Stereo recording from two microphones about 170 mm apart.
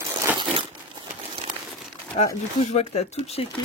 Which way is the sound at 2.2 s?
40° left (ahead or behind).